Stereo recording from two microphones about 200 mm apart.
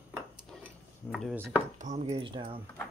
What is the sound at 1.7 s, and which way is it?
Speech, 35° right (ahead or behind).